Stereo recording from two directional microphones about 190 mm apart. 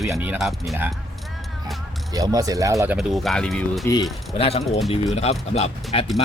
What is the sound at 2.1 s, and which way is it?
Speech, 20° right (ahead or behind).